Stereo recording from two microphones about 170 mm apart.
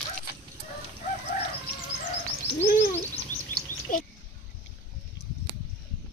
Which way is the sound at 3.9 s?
50° left (ahead or behind).